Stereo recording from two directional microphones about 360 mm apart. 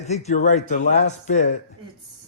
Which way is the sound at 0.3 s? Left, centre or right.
Centre.